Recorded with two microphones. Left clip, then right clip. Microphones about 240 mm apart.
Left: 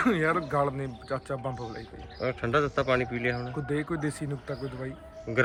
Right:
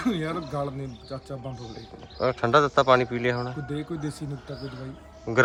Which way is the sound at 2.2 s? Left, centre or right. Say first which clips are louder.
Right 6 dB; centre.